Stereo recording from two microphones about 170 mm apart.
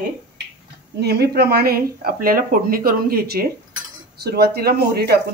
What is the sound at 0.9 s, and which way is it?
Speech, 75° right (ahead or behind).